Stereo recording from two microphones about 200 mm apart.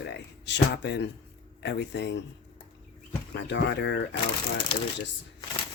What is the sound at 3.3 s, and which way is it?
Speech, 60° left (ahead or behind).